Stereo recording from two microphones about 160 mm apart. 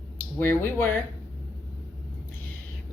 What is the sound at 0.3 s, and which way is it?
Speech, 15° left (ahead or behind).